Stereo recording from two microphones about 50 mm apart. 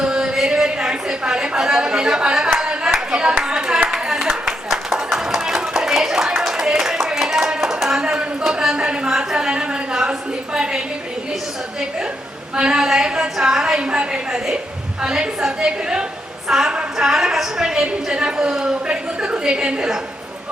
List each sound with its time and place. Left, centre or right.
0.0 s a sound: centre
2.6 s clapping: centre
12.5 s a sound: centre
15.0 s a woman's voice: centre
16.5 s female singing: centre
16.7 s a woman's voice: centre